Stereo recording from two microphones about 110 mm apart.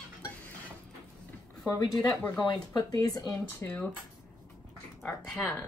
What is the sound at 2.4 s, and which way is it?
Speech, 35° left (ahead or behind).